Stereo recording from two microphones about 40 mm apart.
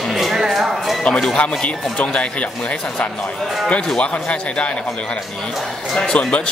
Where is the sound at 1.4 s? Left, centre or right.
Left.